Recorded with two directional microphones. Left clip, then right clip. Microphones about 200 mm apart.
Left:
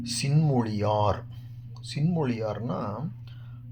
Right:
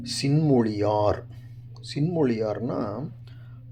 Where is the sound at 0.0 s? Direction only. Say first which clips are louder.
Right 4 dB; 30° right (ahead or behind).